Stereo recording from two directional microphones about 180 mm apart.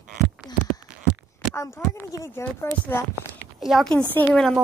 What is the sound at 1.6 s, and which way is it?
Speech, 15° left (ahead or behind).